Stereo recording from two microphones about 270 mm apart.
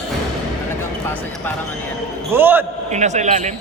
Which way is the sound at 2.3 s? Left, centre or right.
Centre.